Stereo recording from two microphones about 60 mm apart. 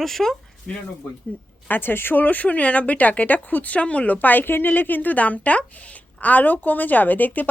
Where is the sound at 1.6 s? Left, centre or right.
Left.